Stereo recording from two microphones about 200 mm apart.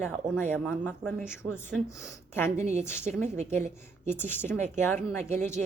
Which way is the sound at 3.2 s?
35° right (ahead or behind).